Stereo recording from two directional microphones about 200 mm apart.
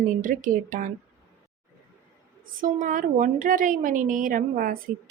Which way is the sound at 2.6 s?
40° right (ahead or behind).